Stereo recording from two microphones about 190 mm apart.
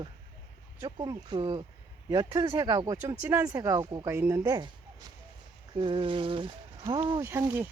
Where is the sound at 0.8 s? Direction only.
20° right (ahead or behind).